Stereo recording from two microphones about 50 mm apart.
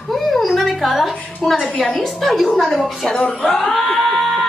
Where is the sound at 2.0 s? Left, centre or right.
Centre.